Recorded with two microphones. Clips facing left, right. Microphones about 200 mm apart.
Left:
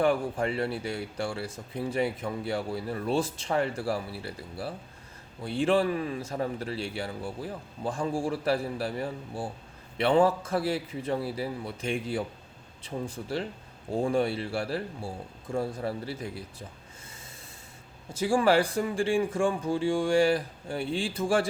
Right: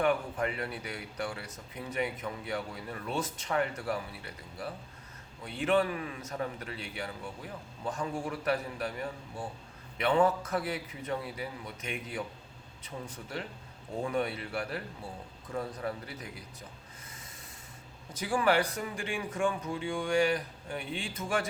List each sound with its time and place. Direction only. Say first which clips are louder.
0.0 s speech: left 4 dB; 30° left (ahead or behind)
18.1 s speech: left 5 dB; 30° left (ahead or behind)